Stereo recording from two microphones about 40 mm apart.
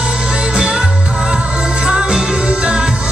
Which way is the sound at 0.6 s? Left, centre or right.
Centre.